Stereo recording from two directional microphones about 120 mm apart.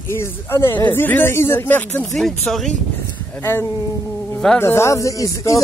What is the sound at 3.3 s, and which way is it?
Speech, 20° left (ahead or behind).